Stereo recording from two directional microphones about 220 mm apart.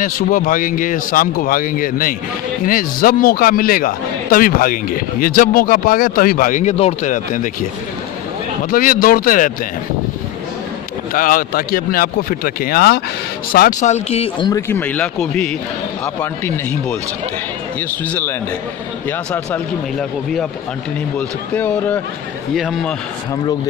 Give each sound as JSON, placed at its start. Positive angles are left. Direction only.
{"t": 0.0, "sound": "a man's voice", "side_deg": 40}
{"t": 8.6, "sound": "a man's voice", "side_deg": 40}
{"t": 11.1, "sound": "a man's voice", "side_deg": 40}
{"t": 14.5, "sound": "speech", "side_deg": 10}
{"t": 17.7, "sound": "speech", "side_deg": 10}
{"t": 21.5, "sound": "a man's voice", "side_deg": 10}